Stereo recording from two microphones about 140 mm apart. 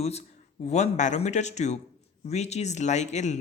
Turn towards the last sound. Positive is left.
turn(degrees=55)  # may be behind; listen again after turning